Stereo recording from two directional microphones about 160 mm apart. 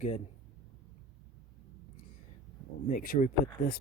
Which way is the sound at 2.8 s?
65° left (ahead or behind).